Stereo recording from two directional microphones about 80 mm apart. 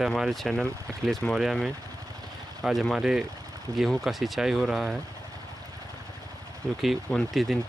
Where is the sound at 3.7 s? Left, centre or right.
Right.